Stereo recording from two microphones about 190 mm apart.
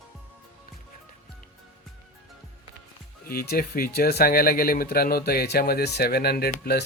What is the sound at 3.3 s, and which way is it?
Speech, 50° left (ahead or behind).